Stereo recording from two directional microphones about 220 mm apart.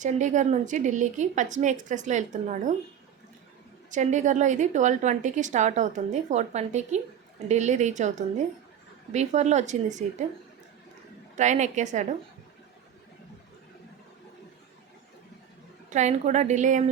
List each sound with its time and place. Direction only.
0.0 s a woman's voice: 35° right (ahead or behind)
3.9 s a woman's voice: 35° right (ahead or behind)
11.3 s a woman's voice: 35° right (ahead or behind)
15.9 s a woman's voice: 30° right (ahead or behind)